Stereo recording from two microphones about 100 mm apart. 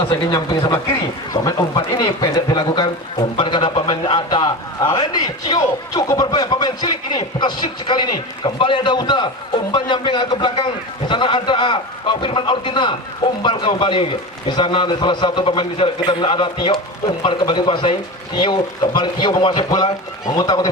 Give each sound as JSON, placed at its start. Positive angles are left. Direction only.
{"t": 0.3, "sound": "a man's voice", "side_deg": 45}